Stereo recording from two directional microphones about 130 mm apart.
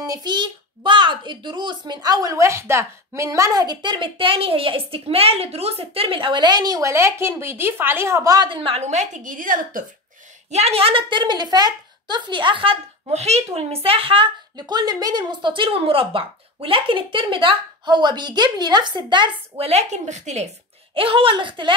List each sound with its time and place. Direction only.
0.0 s a woman's voice: 30° right (ahead or behind)
8.5 s a woman's voice: 45° right (ahead or behind); by 9.8 s 90° right
10.5 s a woman's voice: 50° right (ahead or behind); by 19.3 s 35° right (ahead or behind)
19.5 s a woman's voice: 55° right (ahead or behind)
20.9 s speech: 45° right (ahead or behind)